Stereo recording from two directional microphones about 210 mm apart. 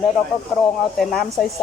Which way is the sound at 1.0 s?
Centre (ahead or behind).